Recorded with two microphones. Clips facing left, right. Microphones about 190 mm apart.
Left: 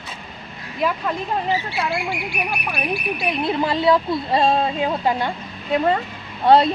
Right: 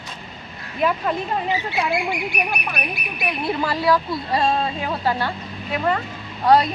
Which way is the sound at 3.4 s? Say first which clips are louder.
Left 1 dB; 20° left (ahead or behind).